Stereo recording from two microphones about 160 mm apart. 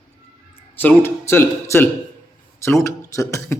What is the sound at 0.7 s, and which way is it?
A man's voice, 10° left (ahead or behind).